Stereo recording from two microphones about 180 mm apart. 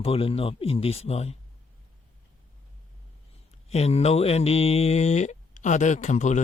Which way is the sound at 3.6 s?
35° left (ahead or behind).